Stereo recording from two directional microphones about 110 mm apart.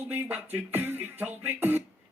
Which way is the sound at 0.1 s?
15° right (ahead or behind).